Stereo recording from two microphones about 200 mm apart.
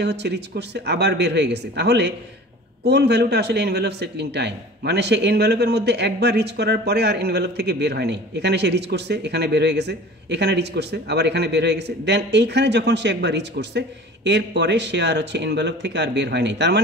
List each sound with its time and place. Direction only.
0.0 s a man's voice: 60° right (ahead or behind)